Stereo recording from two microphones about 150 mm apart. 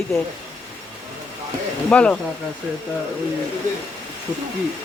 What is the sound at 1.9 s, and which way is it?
Speech, 10° left (ahead or behind).